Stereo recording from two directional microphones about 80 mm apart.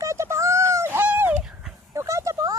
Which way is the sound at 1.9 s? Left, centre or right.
Right.